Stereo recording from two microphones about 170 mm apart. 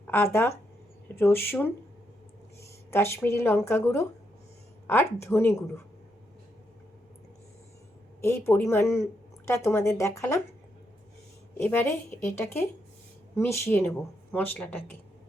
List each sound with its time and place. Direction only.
0.1 s a woman's voice: 15° left (ahead or behind)
8.2 s a woman's voice: 15° left (ahead or behind)
11.6 s a woman's voice: 10° left (ahead or behind)